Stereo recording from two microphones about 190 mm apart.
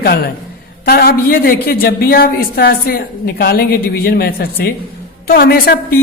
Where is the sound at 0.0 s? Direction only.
55° left (ahead or behind).